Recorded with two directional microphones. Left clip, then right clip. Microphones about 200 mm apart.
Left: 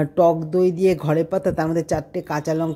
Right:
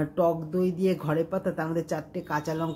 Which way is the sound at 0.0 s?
35° left (ahead or behind).